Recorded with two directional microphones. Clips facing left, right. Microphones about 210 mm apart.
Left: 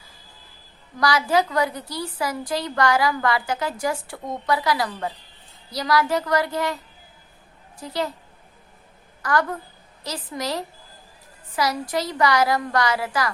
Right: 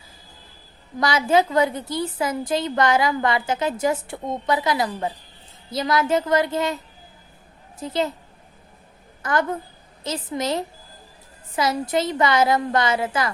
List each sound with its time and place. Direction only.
0.9 s a woman's voice: 25° right (ahead or behind)
7.8 s a woman's voice: 20° right (ahead or behind)
9.2 s a woman's voice: 20° right (ahead or behind)